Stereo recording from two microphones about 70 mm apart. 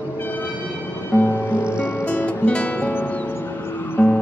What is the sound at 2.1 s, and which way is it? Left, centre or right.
Music, left.